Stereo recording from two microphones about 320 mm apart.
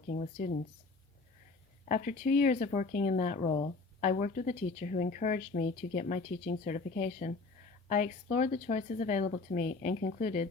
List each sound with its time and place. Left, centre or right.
0.1 s speech: left
1.8 s speech: left